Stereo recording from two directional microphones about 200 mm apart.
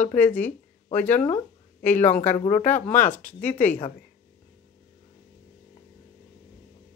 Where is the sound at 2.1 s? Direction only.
40° left (ahead or behind).